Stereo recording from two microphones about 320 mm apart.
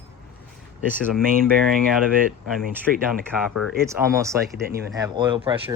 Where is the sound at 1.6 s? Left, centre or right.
Centre.